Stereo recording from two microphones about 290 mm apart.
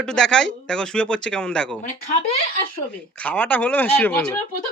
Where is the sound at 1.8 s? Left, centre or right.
Left.